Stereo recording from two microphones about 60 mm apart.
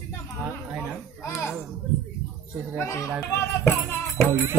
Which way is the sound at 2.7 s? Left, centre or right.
Left.